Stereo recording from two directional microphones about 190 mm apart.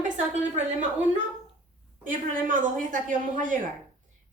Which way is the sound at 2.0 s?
45° right (ahead or behind).